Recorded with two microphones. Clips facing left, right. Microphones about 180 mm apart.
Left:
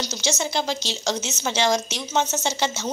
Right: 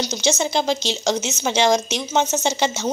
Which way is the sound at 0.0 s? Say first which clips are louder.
Right 5 dB; 20° right (ahead or behind).